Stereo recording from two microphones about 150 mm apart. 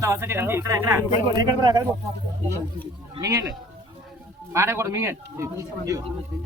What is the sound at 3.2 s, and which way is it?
Speech, 25° right (ahead or behind).